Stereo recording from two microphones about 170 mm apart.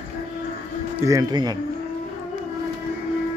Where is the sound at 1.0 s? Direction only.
20° right (ahead or behind).